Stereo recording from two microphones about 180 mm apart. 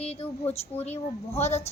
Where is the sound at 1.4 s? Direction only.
35° left (ahead or behind).